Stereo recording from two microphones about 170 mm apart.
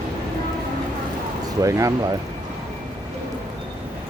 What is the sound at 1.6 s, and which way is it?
Speech, 20° right (ahead or behind).